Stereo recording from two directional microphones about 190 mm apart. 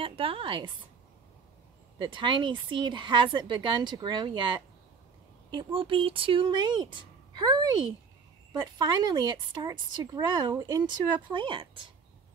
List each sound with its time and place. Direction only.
0.0 s speech: 30° right (ahead or behind)
2.0 s speech: 25° right (ahead or behind)